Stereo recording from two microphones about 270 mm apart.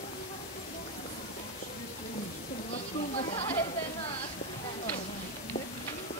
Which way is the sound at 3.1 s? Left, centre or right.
Centre.